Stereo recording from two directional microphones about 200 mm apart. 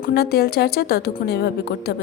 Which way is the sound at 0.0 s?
50° left (ahead or behind).